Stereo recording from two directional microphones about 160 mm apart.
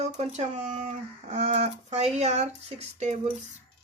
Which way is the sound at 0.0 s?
45° right (ahead or behind).